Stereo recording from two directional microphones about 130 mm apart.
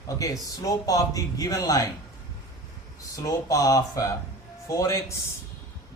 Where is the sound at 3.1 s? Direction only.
25° left (ahead or behind).